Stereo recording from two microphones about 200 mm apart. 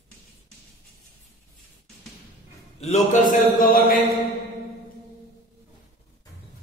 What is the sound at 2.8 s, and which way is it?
A man's voice, 35° left (ahead or behind).